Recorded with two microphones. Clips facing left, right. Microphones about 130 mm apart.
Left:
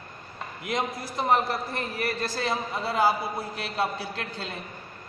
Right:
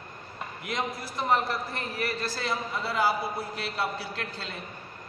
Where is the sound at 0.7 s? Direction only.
20° left (ahead or behind).